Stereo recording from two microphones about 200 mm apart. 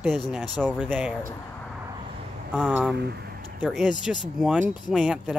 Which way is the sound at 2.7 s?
5° right (ahead or behind).